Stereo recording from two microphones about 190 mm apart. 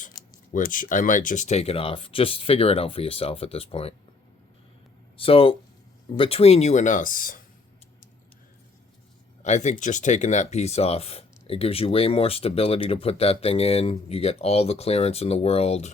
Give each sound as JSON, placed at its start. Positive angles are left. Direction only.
{"t": 0.5, "sound": "speech", "side_deg": 45}
{"t": 5.1, "sound": "speech", "side_deg": 30}
{"t": 9.4, "sound": "speech", "side_deg": 40}